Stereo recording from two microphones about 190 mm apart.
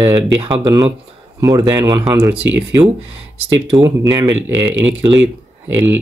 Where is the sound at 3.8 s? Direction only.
20° right (ahead or behind).